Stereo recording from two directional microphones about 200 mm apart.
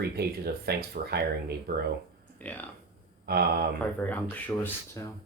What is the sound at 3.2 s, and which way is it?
Speech, 50° right (ahead or behind).